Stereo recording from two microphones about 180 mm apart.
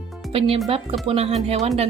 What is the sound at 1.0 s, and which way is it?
Speech, 35° right (ahead or behind).